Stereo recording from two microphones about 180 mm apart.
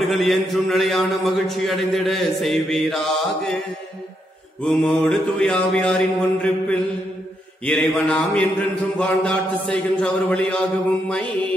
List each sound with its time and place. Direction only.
0.1 s a man's voice: centre (ahead or behind)
4.6 s a man's voice: 5° left (ahead or behind)